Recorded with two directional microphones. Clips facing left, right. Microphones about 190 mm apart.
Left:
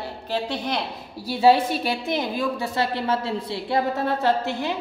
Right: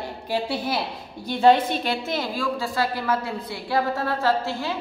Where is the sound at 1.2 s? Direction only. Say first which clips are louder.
Even; 5° left (ahead or behind).